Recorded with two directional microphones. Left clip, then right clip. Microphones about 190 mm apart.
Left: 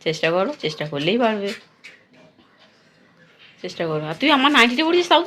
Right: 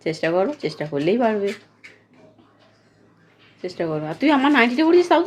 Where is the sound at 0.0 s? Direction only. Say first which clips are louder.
Left 1 dB; 20° right (ahead or behind).